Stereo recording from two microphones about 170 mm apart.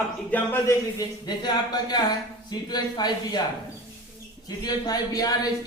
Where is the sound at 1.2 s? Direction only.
25° left (ahead or behind).